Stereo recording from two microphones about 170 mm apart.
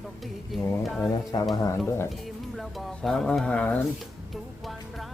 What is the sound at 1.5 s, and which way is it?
Speech, 20° left (ahead or behind).